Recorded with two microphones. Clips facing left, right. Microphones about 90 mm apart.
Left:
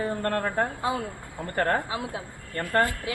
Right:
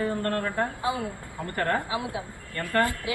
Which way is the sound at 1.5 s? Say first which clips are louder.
Left 1 dB; 40° left (ahead or behind).